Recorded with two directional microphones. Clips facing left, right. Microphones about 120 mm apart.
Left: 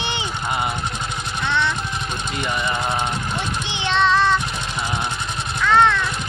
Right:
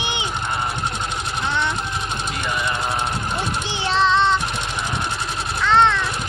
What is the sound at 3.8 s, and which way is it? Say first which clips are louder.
Child singing: even; 35° right (ahead or behind).